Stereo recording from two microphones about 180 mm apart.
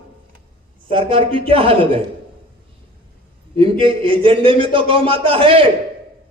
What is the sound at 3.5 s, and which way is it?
Speech, 30° right (ahead or behind).